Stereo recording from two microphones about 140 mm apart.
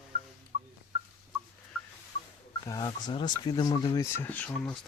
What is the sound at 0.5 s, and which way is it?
Fowl, 65° right (ahead or behind).